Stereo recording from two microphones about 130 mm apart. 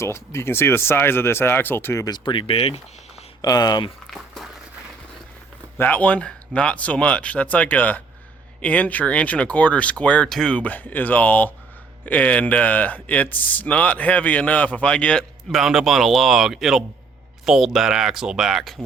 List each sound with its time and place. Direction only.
0.0 s speech: 20° left (ahead or behind)
2.0 s speech: 35° left (ahead or behind)
3.4 s speech: 30° left (ahead or behind)
4.0 s a sound: centre (ahead or behind)
5.7 s speech: 15° left (ahead or behind); by 18.7 s 5° right (ahead or behind)